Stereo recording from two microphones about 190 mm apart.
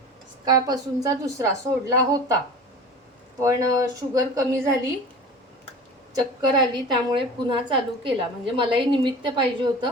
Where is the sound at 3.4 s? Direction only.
20° right (ahead or behind).